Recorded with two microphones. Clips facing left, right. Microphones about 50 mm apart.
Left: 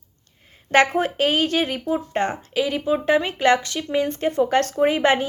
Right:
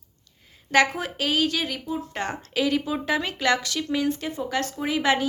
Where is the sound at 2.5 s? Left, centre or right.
Centre.